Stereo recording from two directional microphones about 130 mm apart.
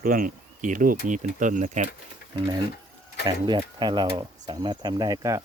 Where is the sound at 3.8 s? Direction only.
35° right (ahead or behind).